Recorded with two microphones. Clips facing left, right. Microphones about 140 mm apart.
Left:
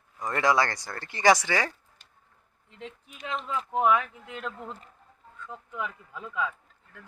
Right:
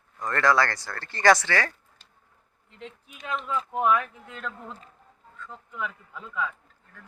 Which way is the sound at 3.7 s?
20° left (ahead or behind).